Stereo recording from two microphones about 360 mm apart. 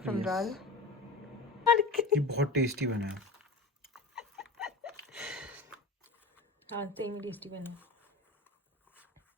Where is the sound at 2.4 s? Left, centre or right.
Right.